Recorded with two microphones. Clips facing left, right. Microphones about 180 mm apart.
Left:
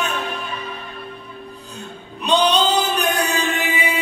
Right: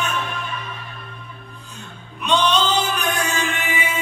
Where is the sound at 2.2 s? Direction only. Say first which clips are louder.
Left 2 dB; 35° left (ahead or behind).